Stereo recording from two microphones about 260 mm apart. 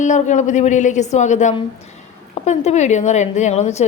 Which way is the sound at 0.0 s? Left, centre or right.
Left.